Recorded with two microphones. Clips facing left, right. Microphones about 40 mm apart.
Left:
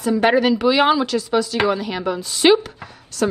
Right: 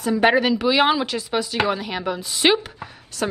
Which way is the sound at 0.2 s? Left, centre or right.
Centre.